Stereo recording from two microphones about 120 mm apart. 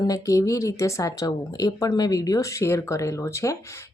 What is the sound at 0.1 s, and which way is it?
Speech, 30° left (ahead or behind).